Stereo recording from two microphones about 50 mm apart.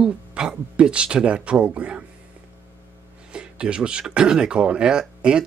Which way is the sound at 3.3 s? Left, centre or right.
Centre.